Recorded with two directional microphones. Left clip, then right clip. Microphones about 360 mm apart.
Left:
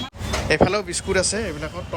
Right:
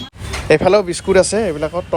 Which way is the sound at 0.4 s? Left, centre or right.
Centre.